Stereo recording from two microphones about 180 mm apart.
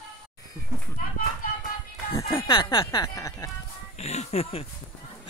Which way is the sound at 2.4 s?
30° left (ahead or behind).